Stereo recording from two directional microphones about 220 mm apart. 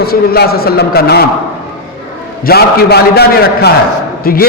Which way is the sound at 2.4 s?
45° left (ahead or behind).